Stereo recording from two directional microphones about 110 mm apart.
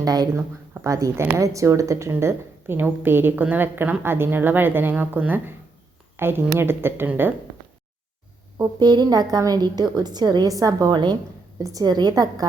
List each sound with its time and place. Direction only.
0.0 s a woman's voice: 35° right (ahead or behind); by 7.3 s 20° right (ahead or behind)
8.5 s a woman's voice: 40° right (ahead or behind)